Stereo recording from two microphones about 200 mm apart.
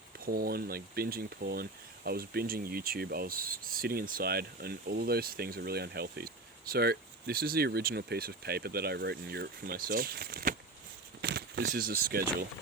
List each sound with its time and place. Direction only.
0.3 s speech: 50° right (ahead or behind)
11.2 s a sound: 55° right (ahead or behind)
11.6 s speech: 45° right (ahead or behind)